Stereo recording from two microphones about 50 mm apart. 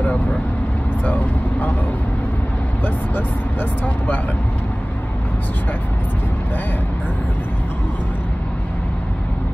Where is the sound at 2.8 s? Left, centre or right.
Left.